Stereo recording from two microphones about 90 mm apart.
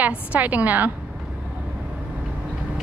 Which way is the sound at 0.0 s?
20° right (ahead or behind).